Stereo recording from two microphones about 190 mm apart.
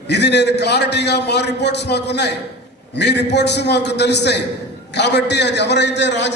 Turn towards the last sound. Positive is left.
turn(degrees=65)  # may be behind; listen again after turning